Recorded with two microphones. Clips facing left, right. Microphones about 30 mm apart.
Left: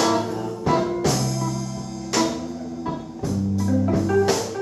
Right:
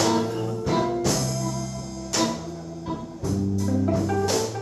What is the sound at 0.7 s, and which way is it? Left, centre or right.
Music, centre.